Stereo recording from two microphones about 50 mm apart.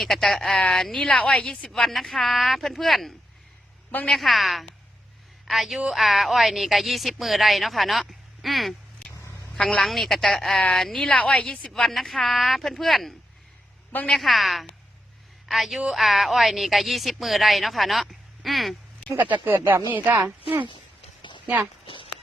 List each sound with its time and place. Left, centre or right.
0.0 s speech: centre
1.0 s a woman's voice: left
1.7 s speech: centre
4.1 s speech: centre
9.8 s speech: centre
11.0 s a woman's voice: left
11.9 s a woman's voice: centre
19.2 s speech: right